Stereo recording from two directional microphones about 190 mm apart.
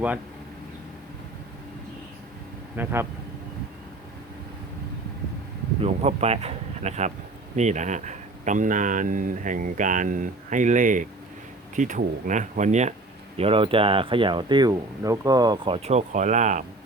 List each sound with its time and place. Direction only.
2.7 s speech: 10° right (ahead or behind)
5.8 s speech: 35° right (ahead or behind)